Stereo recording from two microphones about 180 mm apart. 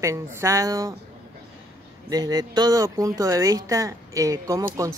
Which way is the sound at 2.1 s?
20° right (ahead or behind).